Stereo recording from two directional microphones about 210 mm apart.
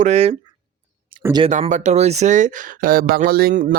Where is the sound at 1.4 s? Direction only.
30° right (ahead or behind).